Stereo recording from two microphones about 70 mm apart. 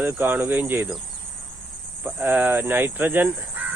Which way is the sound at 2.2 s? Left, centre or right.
Right.